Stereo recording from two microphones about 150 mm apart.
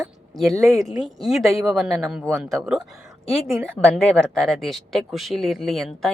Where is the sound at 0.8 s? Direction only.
Centre (ahead or behind).